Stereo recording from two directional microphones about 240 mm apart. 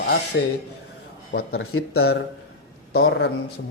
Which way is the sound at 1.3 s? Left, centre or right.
Left.